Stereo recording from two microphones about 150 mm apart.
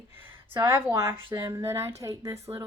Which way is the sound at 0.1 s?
15° right (ahead or behind).